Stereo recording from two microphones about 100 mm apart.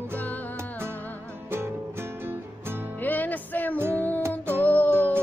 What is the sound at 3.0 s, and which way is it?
Music, 15° left (ahead or behind).